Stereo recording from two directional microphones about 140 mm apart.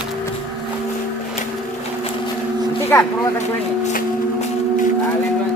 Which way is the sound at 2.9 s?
15° left (ahead or behind).